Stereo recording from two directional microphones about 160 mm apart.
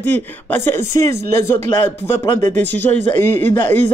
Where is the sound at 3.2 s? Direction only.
15° left (ahead or behind).